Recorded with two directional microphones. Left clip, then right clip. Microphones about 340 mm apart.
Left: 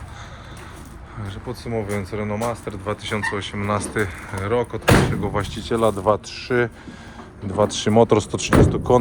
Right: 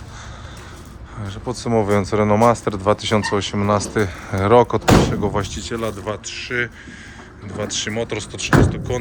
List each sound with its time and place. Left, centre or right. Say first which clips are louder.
1.2 s speech: right 5 dB; centre
1.5 s speech: right 9 dB; centre
8.0 s speech: left 7 dB; left
8.7 s speech: left 8 dB; centre